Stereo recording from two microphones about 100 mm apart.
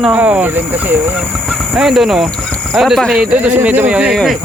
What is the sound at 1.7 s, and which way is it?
Speech, 5° right (ahead or behind).